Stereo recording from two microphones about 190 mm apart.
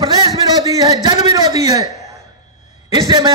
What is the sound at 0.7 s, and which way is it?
Speech, 20° right (ahead or behind).